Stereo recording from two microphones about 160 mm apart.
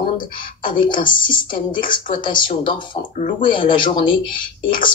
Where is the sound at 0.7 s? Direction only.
30° left (ahead or behind).